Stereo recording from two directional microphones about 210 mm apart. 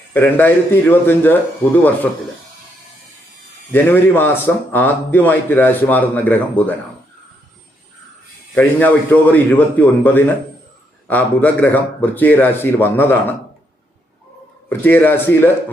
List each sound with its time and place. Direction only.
0.1 s a man's voice: 10° left (ahead or behind)
3.7 s a man's voice: 10° left (ahead or behind)
8.5 s a man's voice: 10° left (ahead or behind)
14.7 s a man's voice: 10° left (ahead or behind)